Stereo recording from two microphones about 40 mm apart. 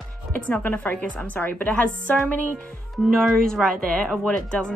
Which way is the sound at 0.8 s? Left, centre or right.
Left.